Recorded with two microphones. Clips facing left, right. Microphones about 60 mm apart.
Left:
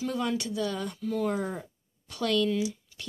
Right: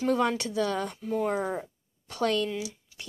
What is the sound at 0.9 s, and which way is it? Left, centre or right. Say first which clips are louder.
Speech: right 1 dB; right.